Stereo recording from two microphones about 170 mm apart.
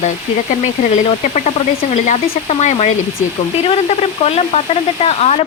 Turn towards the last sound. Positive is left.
turn(degrees=40)  # may be behind; listen again after turning